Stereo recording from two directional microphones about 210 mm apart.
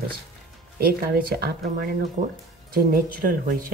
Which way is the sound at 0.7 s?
45° right (ahead or behind).